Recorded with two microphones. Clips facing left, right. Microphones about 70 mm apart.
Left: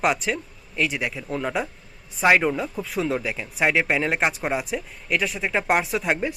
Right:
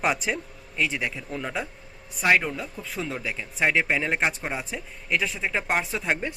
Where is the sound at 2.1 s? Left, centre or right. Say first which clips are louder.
Left 4 dB; left.